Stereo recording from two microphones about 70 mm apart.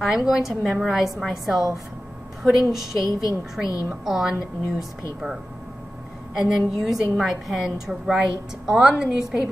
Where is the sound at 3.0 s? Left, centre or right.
Left.